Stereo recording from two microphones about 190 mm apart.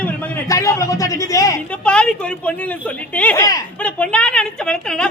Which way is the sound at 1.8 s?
5° left (ahead or behind).